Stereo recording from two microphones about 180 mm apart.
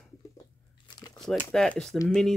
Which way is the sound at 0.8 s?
25° left (ahead or behind).